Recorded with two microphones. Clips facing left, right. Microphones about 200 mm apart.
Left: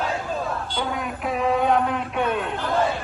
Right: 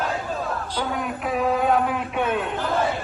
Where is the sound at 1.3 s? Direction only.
Centre (ahead or behind).